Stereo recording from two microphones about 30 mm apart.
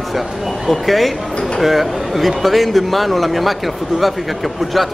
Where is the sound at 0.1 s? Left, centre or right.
Centre.